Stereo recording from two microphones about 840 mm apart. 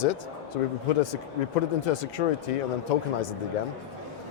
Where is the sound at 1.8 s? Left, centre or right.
Left.